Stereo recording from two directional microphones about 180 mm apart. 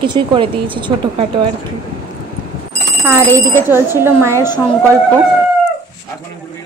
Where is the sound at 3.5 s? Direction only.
15° right (ahead or behind).